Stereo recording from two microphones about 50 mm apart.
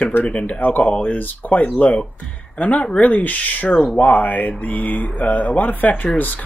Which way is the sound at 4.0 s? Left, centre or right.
Left.